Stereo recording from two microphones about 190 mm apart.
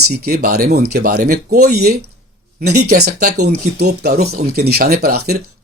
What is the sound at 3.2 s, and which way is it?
Speech, 40° right (ahead or behind).